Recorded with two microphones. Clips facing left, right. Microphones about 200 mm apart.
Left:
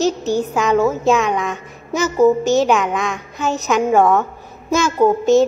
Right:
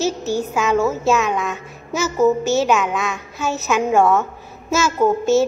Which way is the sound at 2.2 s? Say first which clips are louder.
Left 3 dB; 15° left (ahead or behind).